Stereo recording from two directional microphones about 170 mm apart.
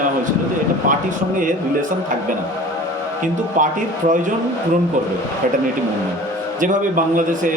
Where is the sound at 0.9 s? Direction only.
50° right (ahead or behind).